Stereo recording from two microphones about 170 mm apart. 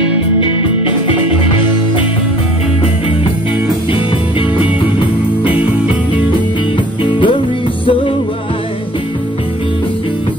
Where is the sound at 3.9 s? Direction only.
30° left (ahead or behind).